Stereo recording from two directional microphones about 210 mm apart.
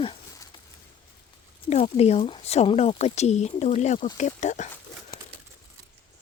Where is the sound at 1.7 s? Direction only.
30° left (ahead or behind).